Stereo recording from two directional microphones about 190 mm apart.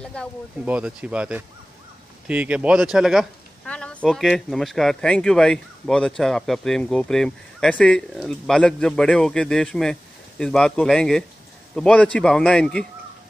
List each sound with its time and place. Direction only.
0.0 s speech: 5° left (ahead or behind)
0.7 s speech: 5° right (ahead or behind)